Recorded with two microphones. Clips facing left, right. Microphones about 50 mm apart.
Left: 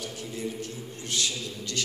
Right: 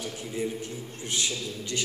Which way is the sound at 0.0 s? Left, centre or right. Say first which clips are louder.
Right 2 dB; centre.